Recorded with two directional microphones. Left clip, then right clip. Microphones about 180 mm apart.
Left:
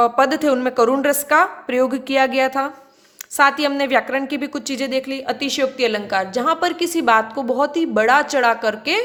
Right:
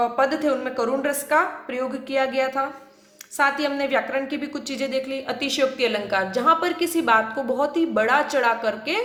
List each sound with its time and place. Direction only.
0.0 s a woman's voice: 50° left (ahead or behind)